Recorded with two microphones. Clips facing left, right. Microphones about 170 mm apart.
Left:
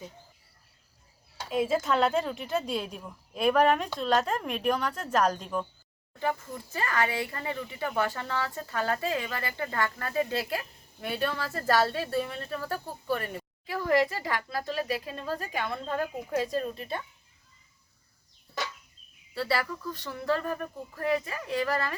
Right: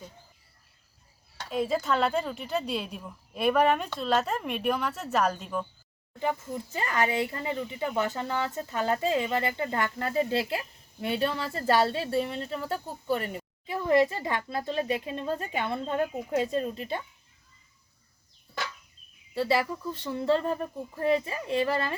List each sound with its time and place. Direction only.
1.4 s speech: centre (ahead or behind)
6.1 s speech: 20° right (ahead or behind)
19.3 s speech: 20° right (ahead or behind)